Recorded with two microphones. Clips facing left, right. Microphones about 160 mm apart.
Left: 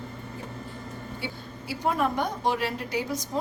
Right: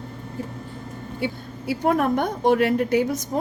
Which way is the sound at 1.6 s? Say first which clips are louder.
Right 6 dB; 55° right (ahead or behind).